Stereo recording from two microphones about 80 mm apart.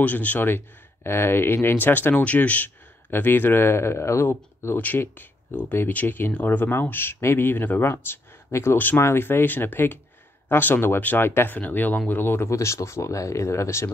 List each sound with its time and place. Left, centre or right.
0.0 s speech: left
8.7 s speech: left